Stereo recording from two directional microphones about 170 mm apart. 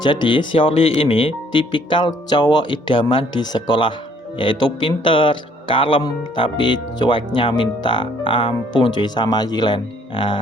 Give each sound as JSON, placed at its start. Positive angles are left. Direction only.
{"t": 0.0, "sound": "speech", "side_deg": 25}